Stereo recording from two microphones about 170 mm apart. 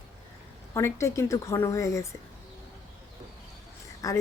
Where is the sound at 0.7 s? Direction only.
15° left (ahead or behind).